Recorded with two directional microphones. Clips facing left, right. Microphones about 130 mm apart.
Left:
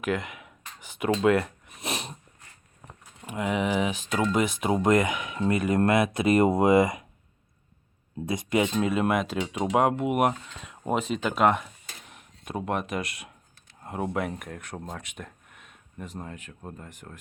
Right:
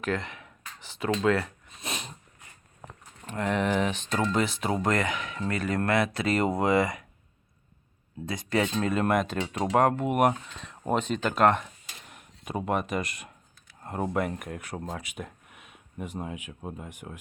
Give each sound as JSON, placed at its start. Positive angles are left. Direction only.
{"t": 0.0, "sound": "a sound", "side_deg": 10}
{"t": 3.0, "sound": "speech", "side_deg": 10}
{"t": 8.3, "sound": "speech", "side_deg": 20}